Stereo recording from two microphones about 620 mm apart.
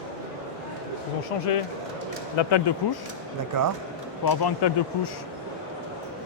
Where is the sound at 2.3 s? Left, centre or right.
Left.